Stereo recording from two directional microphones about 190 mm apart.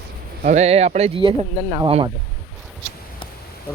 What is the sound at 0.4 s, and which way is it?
Speech, 35° right (ahead or behind).